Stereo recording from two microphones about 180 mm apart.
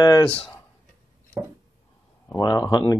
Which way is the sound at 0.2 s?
5° left (ahead or behind).